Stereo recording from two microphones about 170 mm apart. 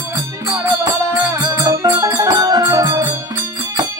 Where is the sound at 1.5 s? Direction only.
15° right (ahead or behind).